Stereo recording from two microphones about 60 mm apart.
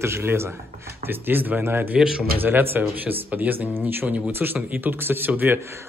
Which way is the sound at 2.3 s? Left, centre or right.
Right.